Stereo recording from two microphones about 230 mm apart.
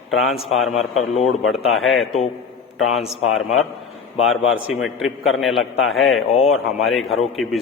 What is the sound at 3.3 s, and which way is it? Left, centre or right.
Speech, centre.